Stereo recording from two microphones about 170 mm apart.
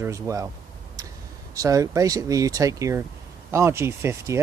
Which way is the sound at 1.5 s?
20° right (ahead or behind).